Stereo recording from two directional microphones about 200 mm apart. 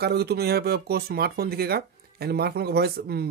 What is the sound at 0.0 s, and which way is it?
Speech, 55° right (ahead or behind).